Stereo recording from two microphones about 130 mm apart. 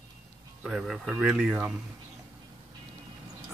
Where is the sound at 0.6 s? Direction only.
5° right (ahead or behind).